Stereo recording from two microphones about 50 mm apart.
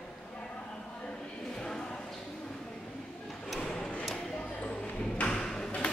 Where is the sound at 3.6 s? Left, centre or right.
Centre.